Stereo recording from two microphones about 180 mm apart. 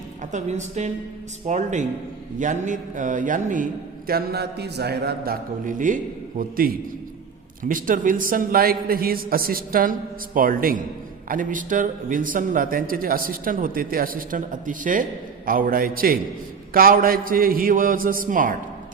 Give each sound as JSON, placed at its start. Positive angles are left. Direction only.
{"t": 0.3, "sound": "a woman's voice", "side_deg": -40}